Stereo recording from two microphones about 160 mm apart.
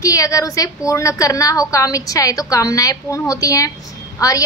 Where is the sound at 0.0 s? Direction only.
20° left (ahead or behind).